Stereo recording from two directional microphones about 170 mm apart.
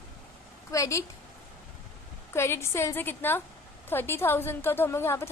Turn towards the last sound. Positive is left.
turn(degrees=15)  # may be behind; listen again after turning